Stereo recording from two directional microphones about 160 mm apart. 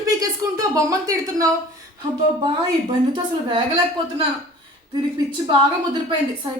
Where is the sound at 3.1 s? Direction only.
30° right (ahead or behind).